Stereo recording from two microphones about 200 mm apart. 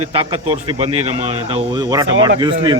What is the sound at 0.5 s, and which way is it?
Speech, 30° right (ahead or behind).